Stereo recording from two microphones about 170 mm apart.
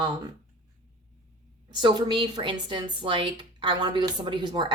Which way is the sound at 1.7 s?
25° right (ahead or behind).